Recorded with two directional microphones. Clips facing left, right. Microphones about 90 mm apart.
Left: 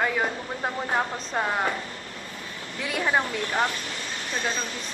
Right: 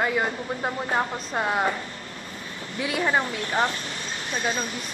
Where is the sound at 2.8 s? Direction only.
5° right (ahead or behind).